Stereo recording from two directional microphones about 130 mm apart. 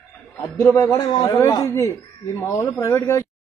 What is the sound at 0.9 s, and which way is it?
A man's voice, 35° left (ahead or behind).